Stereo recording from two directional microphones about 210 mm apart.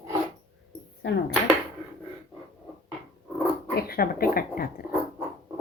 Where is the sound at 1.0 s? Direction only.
65° left (ahead or behind).